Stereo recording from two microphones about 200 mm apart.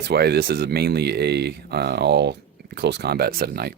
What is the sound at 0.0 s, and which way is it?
Speech, 55° right (ahead or behind).